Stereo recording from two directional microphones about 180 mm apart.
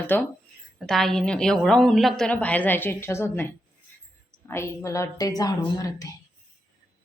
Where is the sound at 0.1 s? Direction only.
10° left (ahead or behind).